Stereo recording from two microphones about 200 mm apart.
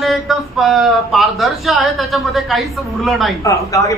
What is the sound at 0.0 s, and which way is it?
Speech, centre (ahead or behind).